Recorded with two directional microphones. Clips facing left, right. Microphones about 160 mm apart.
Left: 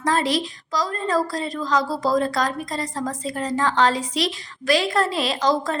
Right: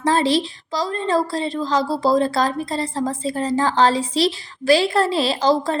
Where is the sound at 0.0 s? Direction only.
30° right (ahead or behind).